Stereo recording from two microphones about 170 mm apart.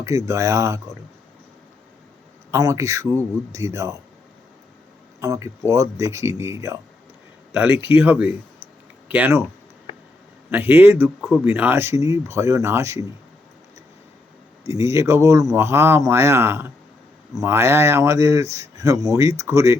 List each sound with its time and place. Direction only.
0.0 s speech: 20° right (ahead or behind)
2.5 s speech: 20° right (ahead or behind)
5.2 s speech: 20° right (ahead or behind)
7.5 s speech: 5° right (ahead or behind)
10.5 s speech: 10° right (ahead or behind)
14.6 s speech: 20° right (ahead or behind)